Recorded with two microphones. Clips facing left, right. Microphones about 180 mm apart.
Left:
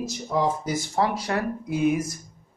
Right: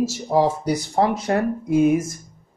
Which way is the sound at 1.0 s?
50° right (ahead or behind).